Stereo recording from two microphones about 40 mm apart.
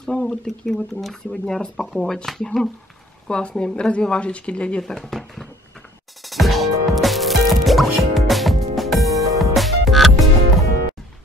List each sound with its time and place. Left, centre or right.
0.0 s speech: centre
3.3 s speech: left
5.1 s a sound: centre
6.2 s music: centre